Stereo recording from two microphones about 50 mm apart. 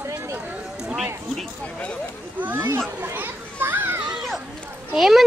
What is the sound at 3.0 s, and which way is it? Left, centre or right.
Children playing, right.